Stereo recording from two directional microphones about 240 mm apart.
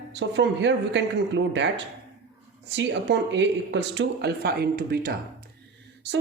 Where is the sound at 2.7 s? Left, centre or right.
Right.